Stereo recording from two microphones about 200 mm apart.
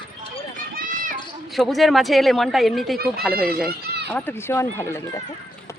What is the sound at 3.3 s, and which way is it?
Speech, 50° right (ahead or behind).